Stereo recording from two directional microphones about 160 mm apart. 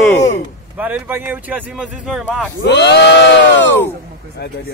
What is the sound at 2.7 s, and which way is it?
Speech, 90° left.